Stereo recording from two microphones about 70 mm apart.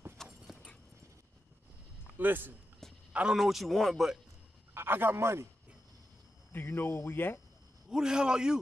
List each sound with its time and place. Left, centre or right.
0.4 s dog: centre
2.1 s speech: right
3.1 s a sound: centre
3.3 s speech: centre
4.7 s a man's voice: right
6.5 s speech: left
7.9 s a man's voice: centre